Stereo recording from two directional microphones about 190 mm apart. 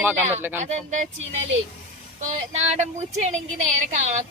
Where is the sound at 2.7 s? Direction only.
35° right (ahead or behind).